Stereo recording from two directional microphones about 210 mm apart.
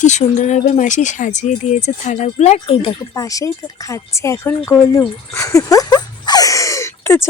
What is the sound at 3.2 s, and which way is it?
Speech, 15° left (ahead or behind).